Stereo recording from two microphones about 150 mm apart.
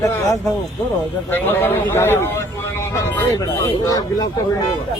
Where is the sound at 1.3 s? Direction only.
15° left (ahead or behind).